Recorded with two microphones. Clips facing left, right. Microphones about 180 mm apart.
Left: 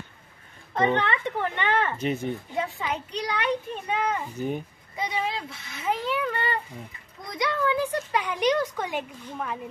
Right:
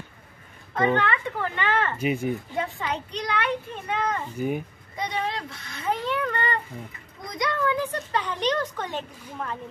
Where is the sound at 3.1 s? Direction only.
15° left (ahead or behind).